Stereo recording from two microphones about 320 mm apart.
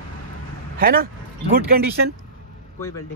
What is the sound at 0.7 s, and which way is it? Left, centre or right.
Speech, right.